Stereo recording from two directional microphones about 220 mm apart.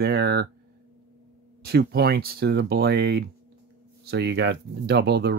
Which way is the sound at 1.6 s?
45° right (ahead or behind).